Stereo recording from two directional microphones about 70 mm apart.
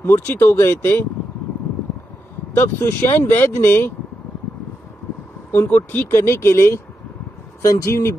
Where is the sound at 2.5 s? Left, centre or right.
Left.